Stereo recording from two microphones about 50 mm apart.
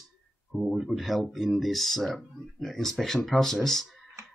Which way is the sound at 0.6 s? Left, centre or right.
Centre.